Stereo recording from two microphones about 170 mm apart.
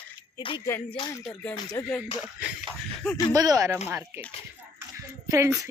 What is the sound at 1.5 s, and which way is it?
Speech, 20° left (ahead or behind).